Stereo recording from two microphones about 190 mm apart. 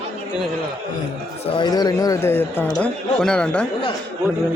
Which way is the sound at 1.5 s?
20° left (ahead or behind).